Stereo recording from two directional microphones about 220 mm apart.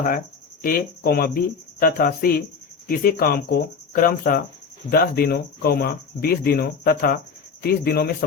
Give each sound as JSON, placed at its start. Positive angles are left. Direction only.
{"t": 0.6, "sound": "speech", "side_deg": 45}